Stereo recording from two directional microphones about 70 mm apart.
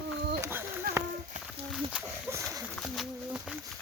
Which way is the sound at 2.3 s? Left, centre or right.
Right.